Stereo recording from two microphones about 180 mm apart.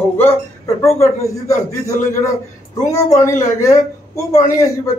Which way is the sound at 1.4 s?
15° left (ahead or behind).